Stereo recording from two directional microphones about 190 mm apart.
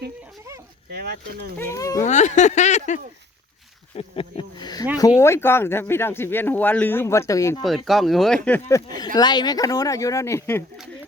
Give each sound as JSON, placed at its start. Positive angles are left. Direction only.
{"t": 0.9, "sound": "speech", "side_deg": -55}
{"t": 1.5, "sound": "speech", "side_deg": 15}
{"t": 2.0, "sound": "speech", "side_deg": 40}
{"t": 7.9, "sound": "speech", "side_deg": 0}
{"t": 8.7, "sound": "speech", "side_deg": 20}